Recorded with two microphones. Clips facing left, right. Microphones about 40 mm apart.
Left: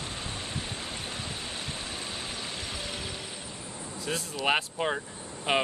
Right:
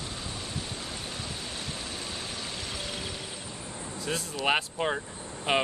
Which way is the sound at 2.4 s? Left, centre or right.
Centre.